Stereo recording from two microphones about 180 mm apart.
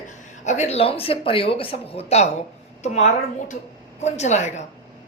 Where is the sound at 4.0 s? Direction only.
40° left (ahead or behind).